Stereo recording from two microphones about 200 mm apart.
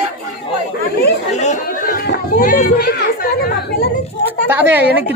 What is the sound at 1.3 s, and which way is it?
Chatter, 35° left (ahead or behind).